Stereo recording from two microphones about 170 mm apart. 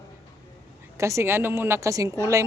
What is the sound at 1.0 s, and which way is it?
A woman's voice, 15° right (ahead or behind).